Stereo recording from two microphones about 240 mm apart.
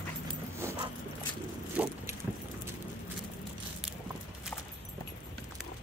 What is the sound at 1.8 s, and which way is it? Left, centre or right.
Vehicle, centre.